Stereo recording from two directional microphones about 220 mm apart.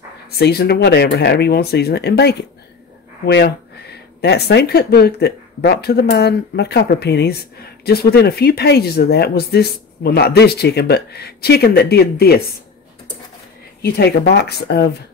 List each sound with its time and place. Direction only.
0.4 s speech: 45° left (ahead or behind)
13.8 s speech: 45° left (ahead or behind)